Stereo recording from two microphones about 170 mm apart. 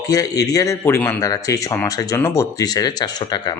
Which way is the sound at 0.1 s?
20° left (ahead or behind).